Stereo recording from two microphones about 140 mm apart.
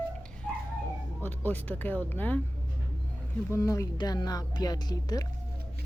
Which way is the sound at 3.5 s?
20° left (ahead or behind).